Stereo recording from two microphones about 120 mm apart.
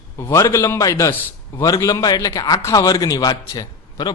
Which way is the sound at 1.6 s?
30° left (ahead or behind).